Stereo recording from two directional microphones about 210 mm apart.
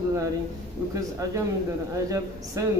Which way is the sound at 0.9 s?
15° right (ahead or behind).